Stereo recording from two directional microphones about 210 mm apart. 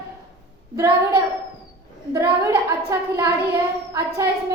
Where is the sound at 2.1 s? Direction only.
15° right (ahead or behind).